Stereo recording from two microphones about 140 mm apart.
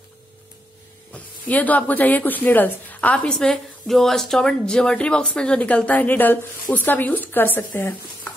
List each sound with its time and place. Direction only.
1.1 s speech: 10° left (ahead or behind)